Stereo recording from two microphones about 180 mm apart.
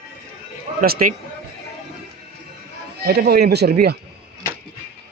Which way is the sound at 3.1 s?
60° right (ahead or behind).